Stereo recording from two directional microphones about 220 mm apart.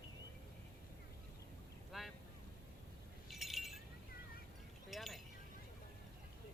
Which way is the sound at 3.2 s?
Centre (ahead or behind).